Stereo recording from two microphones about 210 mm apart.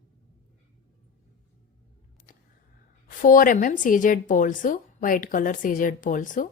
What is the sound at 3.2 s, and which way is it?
A woman's voice, 40° left (ahead or behind).